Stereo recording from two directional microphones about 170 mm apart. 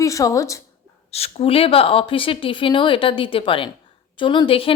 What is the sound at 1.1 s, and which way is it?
A woman's voice, 35° left (ahead or behind).